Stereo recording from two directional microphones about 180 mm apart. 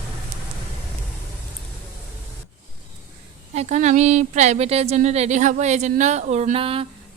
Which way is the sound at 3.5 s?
40° right (ahead or behind).